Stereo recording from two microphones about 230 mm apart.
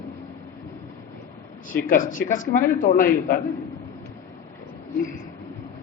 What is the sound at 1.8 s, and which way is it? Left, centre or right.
A man's voice, left.